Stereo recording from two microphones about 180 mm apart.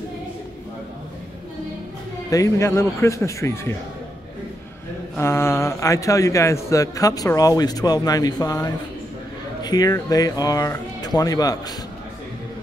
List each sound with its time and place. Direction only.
2.3 s a man's voice: 15° left (ahead or behind)
5.1 s a man's voice: 15° left (ahead or behind)